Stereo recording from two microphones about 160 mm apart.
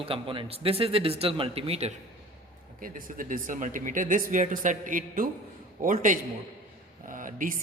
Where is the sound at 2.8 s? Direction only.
60° right (ahead or behind).